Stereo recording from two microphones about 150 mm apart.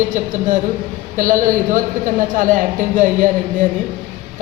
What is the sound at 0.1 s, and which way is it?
A man's voice, 60° right (ahead or behind).